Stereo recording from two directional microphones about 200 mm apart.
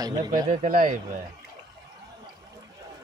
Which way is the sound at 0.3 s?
40° right (ahead or behind).